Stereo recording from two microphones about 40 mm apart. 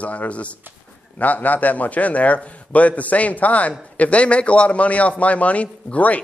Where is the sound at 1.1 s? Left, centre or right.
Left.